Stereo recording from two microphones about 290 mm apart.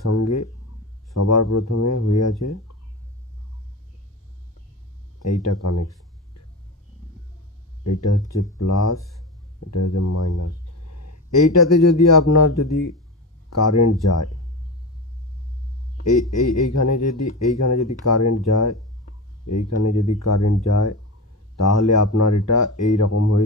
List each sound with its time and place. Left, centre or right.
0.1 s a sound: left
1.1 s speech: left
5.2 s speech: left
7.8 s speech: left
16.0 s speech: left
21.5 s speech: left